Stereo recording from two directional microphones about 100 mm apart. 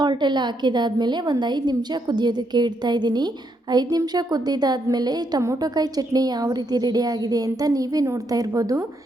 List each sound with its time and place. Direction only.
0.0 s a woman's voice: 50° right (ahead or behind)